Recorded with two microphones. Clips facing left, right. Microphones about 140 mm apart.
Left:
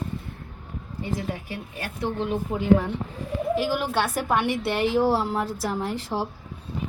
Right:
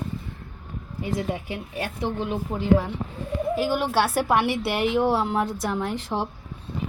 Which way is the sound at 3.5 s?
Centre (ahead or behind).